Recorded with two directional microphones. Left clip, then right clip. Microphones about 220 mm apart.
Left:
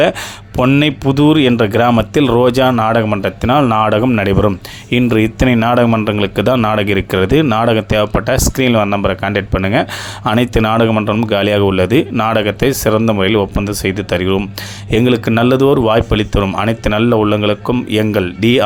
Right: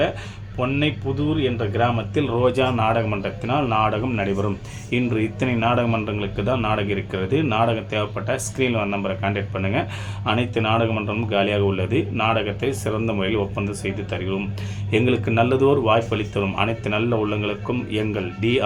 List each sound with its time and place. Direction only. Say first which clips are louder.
0.6 s speech: left 10 dB; 40° left (ahead or behind)